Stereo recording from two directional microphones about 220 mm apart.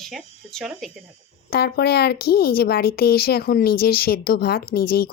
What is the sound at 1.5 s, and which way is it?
Speech, 45° left (ahead or behind).